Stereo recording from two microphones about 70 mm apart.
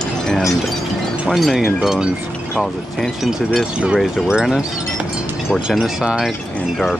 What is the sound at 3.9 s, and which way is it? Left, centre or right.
Speech, centre.